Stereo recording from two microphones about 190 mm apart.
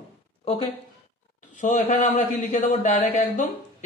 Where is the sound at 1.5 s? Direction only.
40° left (ahead or behind).